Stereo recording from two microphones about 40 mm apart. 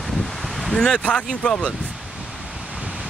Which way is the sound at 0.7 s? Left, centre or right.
Centre.